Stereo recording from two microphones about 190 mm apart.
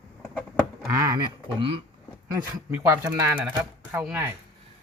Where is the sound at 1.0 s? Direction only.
20° right (ahead or behind).